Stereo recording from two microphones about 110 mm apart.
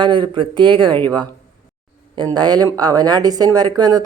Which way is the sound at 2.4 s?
40° right (ahead or behind).